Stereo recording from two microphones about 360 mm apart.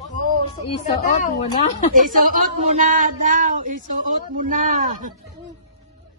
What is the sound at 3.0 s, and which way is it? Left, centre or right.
Child singing, right.